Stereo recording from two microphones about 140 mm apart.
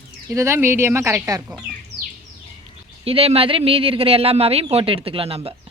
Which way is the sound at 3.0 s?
45° right (ahead or behind).